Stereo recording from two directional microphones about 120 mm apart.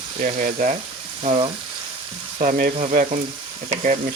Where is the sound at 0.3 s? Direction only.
90° right.